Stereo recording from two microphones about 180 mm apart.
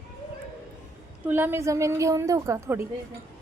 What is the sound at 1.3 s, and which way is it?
A woman's voice, 10° right (ahead or behind).